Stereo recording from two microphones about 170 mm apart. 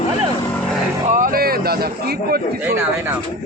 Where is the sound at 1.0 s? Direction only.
50° right (ahead or behind).